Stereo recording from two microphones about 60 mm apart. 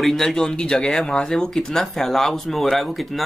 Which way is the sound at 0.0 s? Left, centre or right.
Centre.